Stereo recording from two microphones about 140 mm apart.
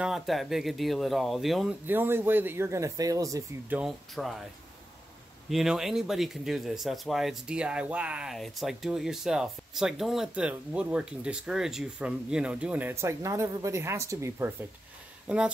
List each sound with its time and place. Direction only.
0.0 s speech: centre (ahead or behind)
1.9 s speech: 15° right (ahead or behind)
3.6 s speech: 10° right (ahead or behind)
4.1 s speech: centre (ahead or behind)
5.5 s speech: centre (ahead or behind); by 14.5 s 20° right (ahead or behind)
15.2 s speech: 5° right (ahead or behind)